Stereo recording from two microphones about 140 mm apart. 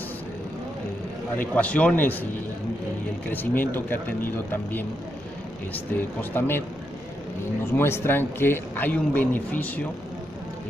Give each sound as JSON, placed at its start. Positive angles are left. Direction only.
{"t": 1.3, "sound": "a man's voice", "side_deg": 10}
{"t": 3.3, "sound": "a man's voice", "side_deg": 15}
{"t": 5.9, "sound": "a man's voice", "side_deg": 15}
{"t": 7.7, "sound": "a man's voice", "side_deg": 15}